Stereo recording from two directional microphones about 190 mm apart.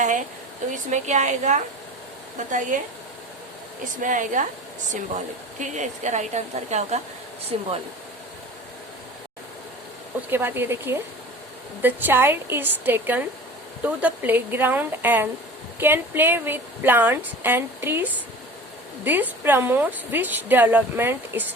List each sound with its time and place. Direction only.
0.0 s speech: 40° right (ahead or behind)
3.9 s speech: 45° right (ahead or behind)
10.2 s a woman's voice: 10° right (ahead or behind)